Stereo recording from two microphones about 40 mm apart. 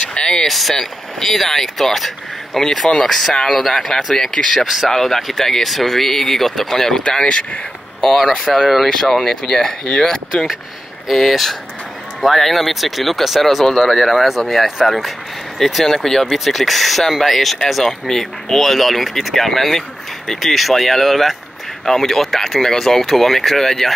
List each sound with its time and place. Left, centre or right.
0.0 s a sound: left
0.5 s speech: centre
4.6 s speech: centre
4.9 s speech: centre
8.0 s speech: centre
10.3 s speech: left
11.1 s speech: centre
13.7 s speech: centre
16.3 s speech: centre